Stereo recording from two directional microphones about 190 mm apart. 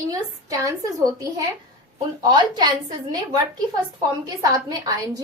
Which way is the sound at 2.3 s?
20° right (ahead or behind).